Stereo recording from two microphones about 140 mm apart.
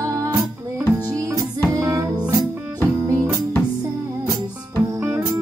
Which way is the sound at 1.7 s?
20° right (ahead or behind).